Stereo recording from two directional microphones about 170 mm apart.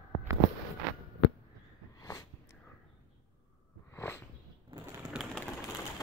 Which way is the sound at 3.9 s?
15° left (ahead or behind).